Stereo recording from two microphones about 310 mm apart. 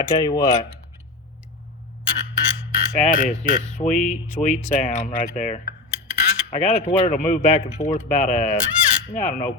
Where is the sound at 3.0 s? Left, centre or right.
Left.